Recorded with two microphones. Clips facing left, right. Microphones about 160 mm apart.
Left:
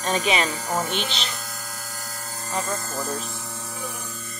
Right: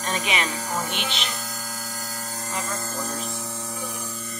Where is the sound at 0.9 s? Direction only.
35° left (ahead or behind).